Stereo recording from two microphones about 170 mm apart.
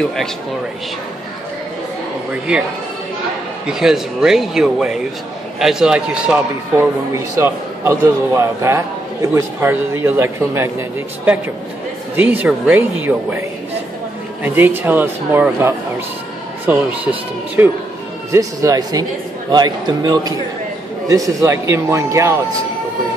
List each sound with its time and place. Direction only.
3.6 s a man's voice: 5° right (ahead or behind)
14.4 s a man's voice: 10° right (ahead or behind)